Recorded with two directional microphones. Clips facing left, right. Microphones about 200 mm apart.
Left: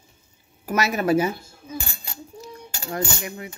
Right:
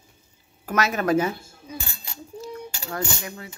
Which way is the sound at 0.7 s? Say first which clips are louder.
Left 1 dB; 10° left (ahead or behind).